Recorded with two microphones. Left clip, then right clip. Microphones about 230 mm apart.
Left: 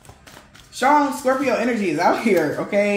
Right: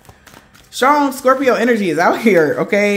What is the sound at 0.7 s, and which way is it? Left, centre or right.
Speech, right.